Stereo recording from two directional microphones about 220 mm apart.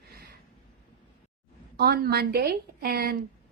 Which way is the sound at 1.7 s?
45° right (ahead or behind).